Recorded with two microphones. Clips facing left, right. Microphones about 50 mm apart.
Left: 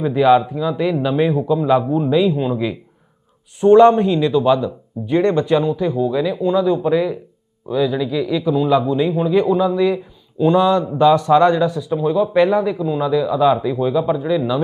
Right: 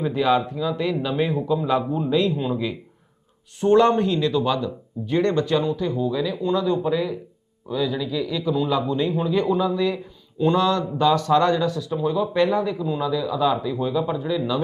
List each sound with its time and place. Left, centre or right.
0.0 s speech: centre